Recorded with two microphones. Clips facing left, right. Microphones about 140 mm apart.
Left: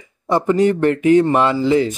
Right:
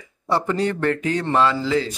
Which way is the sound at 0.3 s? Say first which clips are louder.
Left 6 dB; 20° left (ahead or behind).